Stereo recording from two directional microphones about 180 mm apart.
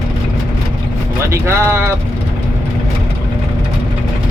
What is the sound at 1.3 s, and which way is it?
Speech, 15° right (ahead or behind).